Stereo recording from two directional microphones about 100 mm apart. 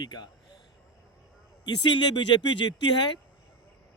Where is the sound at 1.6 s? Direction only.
50° left (ahead or behind).